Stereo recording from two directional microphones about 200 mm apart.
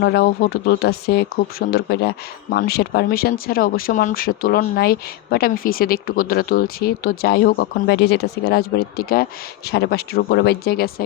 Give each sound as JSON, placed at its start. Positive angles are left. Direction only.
{"t": 0.0, "sound": "speech", "side_deg": 50}